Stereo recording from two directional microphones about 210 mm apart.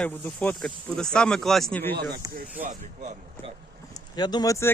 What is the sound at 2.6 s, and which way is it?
Speech, 35° right (ahead or behind).